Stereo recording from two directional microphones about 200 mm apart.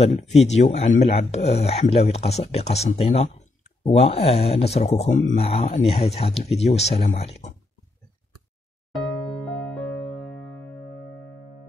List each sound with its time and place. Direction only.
0.3 s speech: 35° left (ahead or behind)